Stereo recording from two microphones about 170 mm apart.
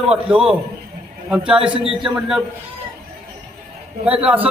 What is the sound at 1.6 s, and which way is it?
Speech, 35° right (ahead or behind).